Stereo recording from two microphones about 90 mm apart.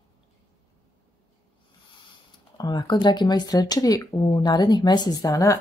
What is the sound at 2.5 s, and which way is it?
Speech, 50° left (ahead or behind).